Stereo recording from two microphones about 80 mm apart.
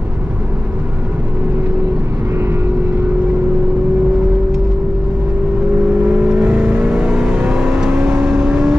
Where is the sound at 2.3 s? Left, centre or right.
Right.